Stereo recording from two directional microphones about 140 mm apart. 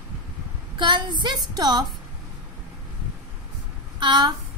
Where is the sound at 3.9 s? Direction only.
35° right (ahead or behind).